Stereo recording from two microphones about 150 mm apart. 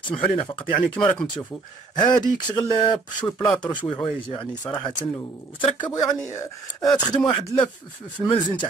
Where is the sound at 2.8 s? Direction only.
30° left (ahead or behind).